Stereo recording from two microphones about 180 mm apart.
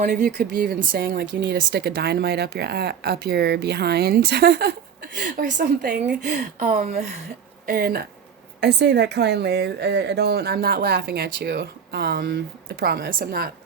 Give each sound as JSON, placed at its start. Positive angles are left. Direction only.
{"t": 0.0, "sound": "speech", "side_deg": -55}
{"t": 1.0, "sound": "speech", "side_deg": -75}
{"t": 7.7, "sound": "speech", "side_deg": -55}